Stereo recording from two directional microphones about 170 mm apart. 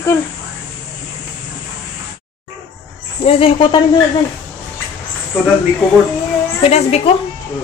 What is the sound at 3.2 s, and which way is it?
Speech, 35° left (ahead or behind).